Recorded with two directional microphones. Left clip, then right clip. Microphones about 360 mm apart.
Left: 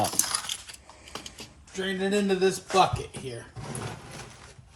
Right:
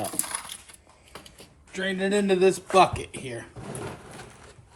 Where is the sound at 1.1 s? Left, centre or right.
Left.